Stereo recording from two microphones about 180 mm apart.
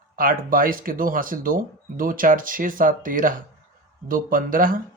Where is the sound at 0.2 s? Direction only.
50° right (ahead or behind).